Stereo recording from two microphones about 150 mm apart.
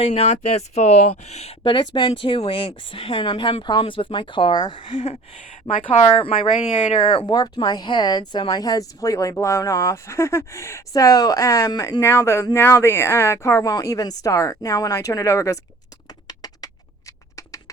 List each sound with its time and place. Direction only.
0.0 s speech: 45° left (ahead or behind)
1.6 s speech: 30° left (ahead or behind)
16.2 s a sound: 25° left (ahead or behind)